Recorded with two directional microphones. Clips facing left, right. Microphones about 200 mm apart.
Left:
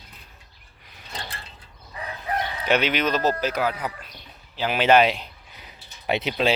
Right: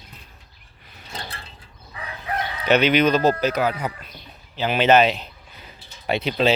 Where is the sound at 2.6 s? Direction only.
5° left (ahead or behind).